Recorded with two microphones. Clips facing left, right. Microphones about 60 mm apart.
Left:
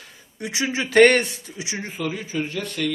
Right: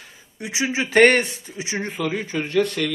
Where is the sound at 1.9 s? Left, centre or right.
Right.